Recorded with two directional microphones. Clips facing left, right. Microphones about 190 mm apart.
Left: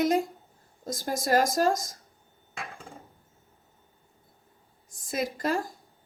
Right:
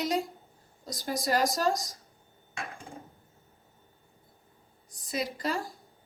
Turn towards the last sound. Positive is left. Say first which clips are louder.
# left 4 dB
turn(degrees=50)  # may be behind; listen again after turning